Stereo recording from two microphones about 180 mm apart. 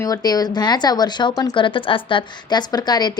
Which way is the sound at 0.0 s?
20° left (ahead or behind).